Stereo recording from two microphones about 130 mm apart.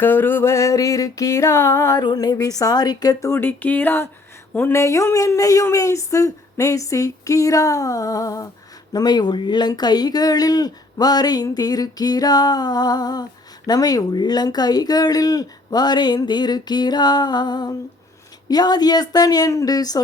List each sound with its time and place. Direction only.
0.0 s speech: 15° left (ahead or behind)
2.0 s speech: 30° left (ahead or behind)